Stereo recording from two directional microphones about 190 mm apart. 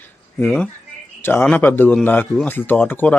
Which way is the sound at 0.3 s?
5° left (ahead or behind).